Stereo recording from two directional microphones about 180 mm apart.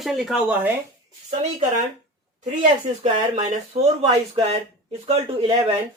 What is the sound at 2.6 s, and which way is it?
Speech, 40° right (ahead or behind).